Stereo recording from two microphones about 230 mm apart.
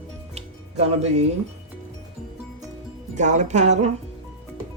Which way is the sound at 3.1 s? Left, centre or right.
Right.